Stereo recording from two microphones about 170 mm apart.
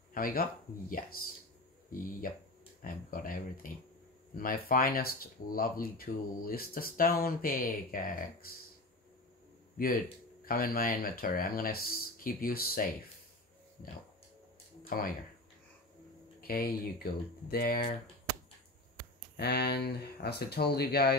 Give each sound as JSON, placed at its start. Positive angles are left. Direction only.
{"t": 0.1, "sound": "speech", "side_deg": 55}
{"t": 10.4, "sound": "speech", "side_deg": 60}
{"t": 14.9, "sound": "speech", "side_deg": 55}
{"t": 16.3, "sound": "speech", "side_deg": 60}
{"t": 19.3, "sound": "speech", "side_deg": 70}